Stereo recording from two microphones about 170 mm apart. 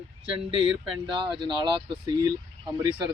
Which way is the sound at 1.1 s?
30° right (ahead or behind).